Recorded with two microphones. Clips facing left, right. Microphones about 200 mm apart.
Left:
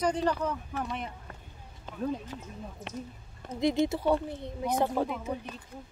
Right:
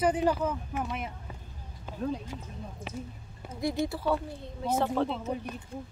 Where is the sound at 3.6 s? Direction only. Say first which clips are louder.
Left 4 dB; 20° left (ahead or behind).